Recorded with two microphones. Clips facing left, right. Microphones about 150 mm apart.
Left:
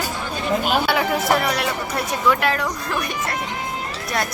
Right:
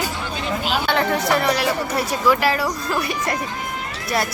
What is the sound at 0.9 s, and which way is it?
Speech, 5° left (ahead or behind).